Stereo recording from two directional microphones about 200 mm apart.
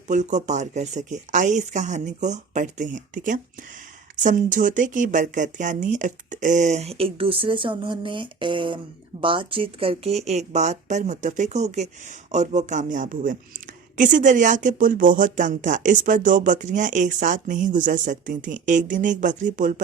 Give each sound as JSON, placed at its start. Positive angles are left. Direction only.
{"t": 0.1, "sound": "speech", "side_deg": -35}